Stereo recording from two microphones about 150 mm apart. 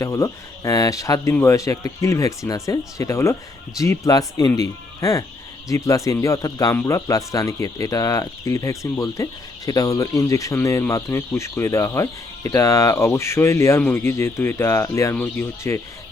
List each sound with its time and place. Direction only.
0.0 s speech: 20° left (ahead or behind)